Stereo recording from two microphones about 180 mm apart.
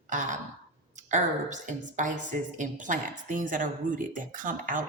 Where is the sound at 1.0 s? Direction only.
45° right (ahead or behind).